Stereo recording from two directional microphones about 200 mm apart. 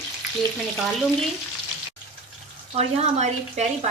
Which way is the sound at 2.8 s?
35° right (ahead or behind).